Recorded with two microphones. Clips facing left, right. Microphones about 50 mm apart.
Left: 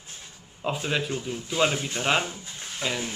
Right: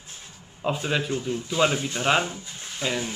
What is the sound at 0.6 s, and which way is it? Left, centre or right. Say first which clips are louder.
Speech: right 2 dB; centre.